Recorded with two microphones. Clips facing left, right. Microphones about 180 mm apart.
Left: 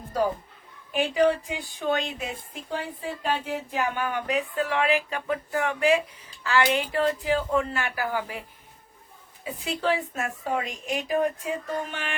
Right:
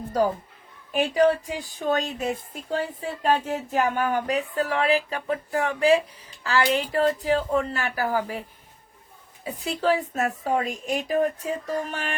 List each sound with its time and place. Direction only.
0.9 s speech: 45° right (ahead or behind)